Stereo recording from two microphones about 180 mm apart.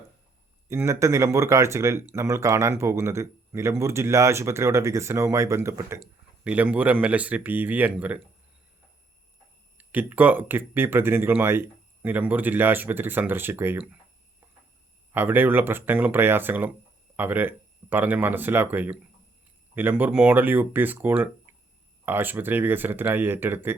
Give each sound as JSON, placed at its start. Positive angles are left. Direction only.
{"t": 0.7, "sound": "speech", "side_deg": -15}
{"t": 9.7, "sound": "speech", "side_deg": -10}
{"t": 15.1, "sound": "speech", "side_deg": -10}